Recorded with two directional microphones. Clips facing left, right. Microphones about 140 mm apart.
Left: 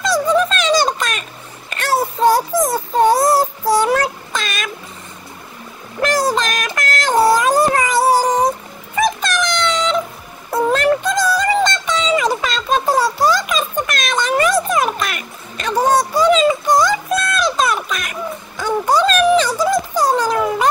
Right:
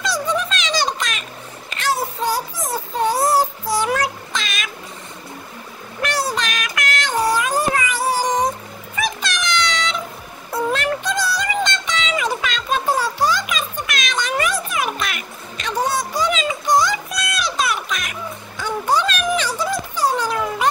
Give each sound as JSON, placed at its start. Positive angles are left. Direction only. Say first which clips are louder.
{"t": 0.0, "sound": "music", "louder": "left 7 dB", "side_deg": 45}
{"t": 4.0, "sound": "a sound", "louder": "left 3 dB", "side_deg": 50}
{"t": 5.9, "sound": "music", "louder": "left 6 dB", "side_deg": 40}